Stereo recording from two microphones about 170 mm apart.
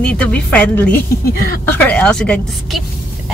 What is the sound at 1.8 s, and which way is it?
Speech, 5° left (ahead or behind).